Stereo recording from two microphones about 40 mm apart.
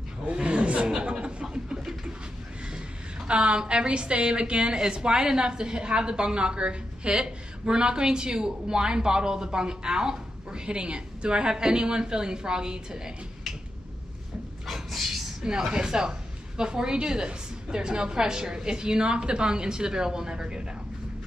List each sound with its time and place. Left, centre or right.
0.3 s a sound: right
3.3 s a woman's voice: right
14.7 s dog: centre
15.4 s a woman's voice: centre